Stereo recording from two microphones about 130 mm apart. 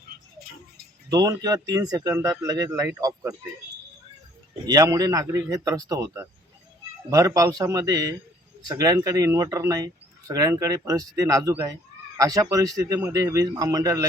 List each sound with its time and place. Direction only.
1.1 s speech: 30° right (ahead or behind)
4.6 s speech: 30° right (ahead or behind)